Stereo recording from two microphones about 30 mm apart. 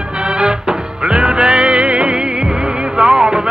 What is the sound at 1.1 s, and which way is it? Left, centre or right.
Music, right.